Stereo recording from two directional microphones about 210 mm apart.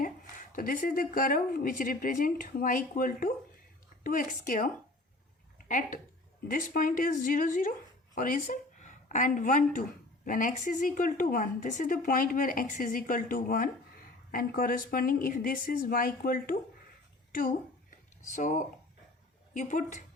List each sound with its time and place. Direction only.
0.5 s a woman's voice: 40° left (ahead or behind)
18.3 s a woman's voice: 35° left (ahead or behind)